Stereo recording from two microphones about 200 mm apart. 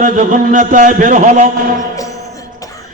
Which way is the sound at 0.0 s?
40° right (ahead or behind).